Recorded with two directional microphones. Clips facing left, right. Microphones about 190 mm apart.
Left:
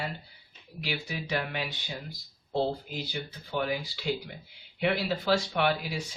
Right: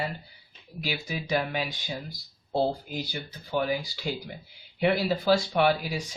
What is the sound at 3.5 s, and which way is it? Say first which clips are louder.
Speech: right 4 dB; 40° right (ahead or behind).